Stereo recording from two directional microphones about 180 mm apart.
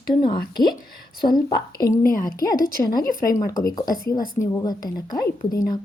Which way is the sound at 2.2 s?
20° left (ahead or behind).